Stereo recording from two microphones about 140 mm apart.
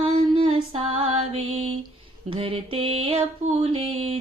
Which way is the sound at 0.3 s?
35° right (ahead or behind).